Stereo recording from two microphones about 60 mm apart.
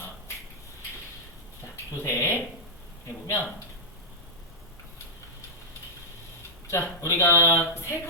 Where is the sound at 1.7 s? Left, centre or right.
Left.